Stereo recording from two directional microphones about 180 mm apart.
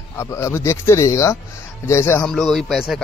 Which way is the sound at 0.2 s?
15° left (ahead or behind).